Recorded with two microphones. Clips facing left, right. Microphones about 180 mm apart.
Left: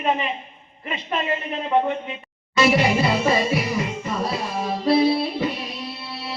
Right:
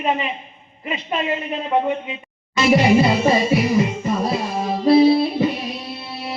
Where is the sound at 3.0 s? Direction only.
20° right (ahead or behind).